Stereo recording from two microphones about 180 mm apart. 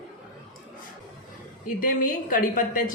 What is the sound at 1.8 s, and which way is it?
A woman's voice, 50° left (ahead or behind).